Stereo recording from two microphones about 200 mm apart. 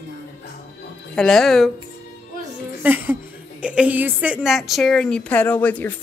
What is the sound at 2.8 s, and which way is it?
A woman's voice, 10° right (ahead or behind).